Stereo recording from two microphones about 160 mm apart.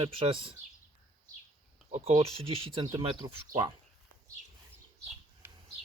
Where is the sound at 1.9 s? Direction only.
40° right (ahead or behind).